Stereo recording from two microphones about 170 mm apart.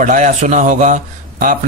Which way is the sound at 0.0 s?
50° right (ahead or behind).